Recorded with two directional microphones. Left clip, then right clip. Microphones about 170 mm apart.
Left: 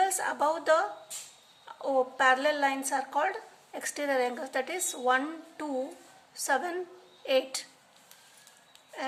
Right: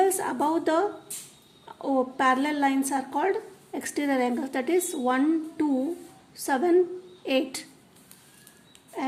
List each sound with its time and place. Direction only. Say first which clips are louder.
0.0 s a woman's voice: right 3 dB; 15° right (ahead or behind)